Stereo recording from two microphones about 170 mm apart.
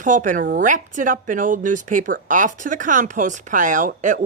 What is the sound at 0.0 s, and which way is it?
Speech, 50° right (ahead or behind).